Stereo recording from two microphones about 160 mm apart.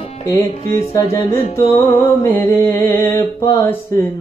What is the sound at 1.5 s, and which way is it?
Music, 15° left (ahead or behind).